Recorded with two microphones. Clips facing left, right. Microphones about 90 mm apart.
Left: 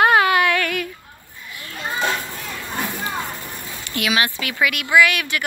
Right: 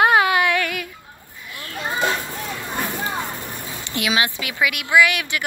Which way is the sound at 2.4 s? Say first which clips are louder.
Right 1 dB; 20° right (ahead or behind).